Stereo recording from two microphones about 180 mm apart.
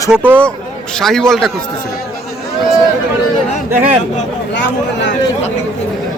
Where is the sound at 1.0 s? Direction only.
5° left (ahead or behind).